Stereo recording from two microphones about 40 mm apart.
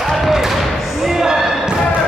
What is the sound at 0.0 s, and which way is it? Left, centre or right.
Basketball bounce, centre.